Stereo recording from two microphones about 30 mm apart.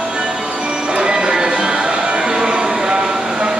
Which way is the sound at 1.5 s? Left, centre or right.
Right.